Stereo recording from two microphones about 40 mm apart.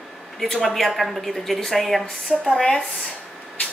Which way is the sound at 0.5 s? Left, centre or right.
Centre.